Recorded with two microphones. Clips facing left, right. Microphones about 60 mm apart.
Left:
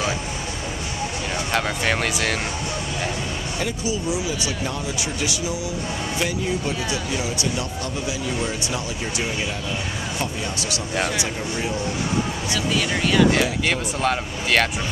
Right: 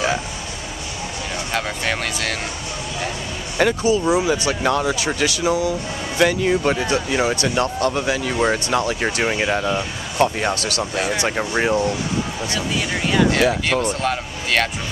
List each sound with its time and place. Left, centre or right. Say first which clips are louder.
1.5 s speech: left 1 dB; centre
3.5 s speech: right 10 dB; right
4.5 s speech: right 8 dB; right
11.2 s speech: right 7 dB; right
12.5 s speech: left 1 dB; centre
13.8 s speech: right 1 dB; centre